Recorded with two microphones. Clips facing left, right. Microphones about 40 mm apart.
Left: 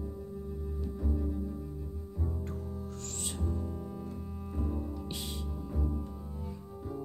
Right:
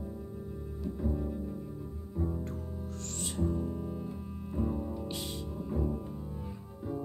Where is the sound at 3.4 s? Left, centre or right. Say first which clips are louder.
Right 6 dB; centre.